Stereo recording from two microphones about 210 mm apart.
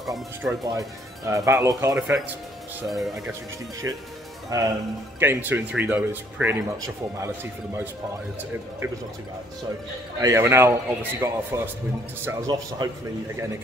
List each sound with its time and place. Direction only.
0.1 s speech: 15° right (ahead or behind)
3.8 s speech: 15° right (ahead or behind)
10.2 s speech: 10° right (ahead or behind)